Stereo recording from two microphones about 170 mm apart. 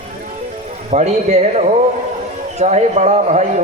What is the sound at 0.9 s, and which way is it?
A man's voice, 40° right (ahead or behind).